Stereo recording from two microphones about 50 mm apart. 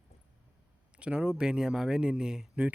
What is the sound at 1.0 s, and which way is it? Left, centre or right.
Speech, right.